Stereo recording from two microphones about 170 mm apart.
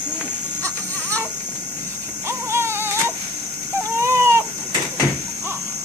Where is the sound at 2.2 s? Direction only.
15° right (ahead or behind).